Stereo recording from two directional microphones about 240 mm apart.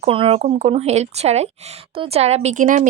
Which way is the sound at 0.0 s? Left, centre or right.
Right.